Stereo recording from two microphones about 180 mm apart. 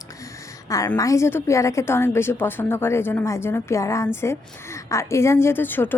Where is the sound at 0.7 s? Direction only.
20° left (ahead or behind).